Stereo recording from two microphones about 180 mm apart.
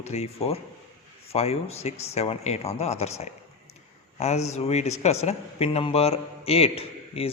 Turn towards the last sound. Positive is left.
turn(degrees=35)  # may be behind; listen again after turning